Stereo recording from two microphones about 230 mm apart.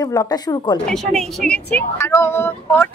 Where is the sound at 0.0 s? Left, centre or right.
Centre.